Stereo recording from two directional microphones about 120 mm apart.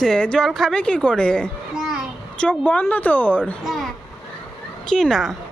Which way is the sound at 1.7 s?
5° right (ahead or behind).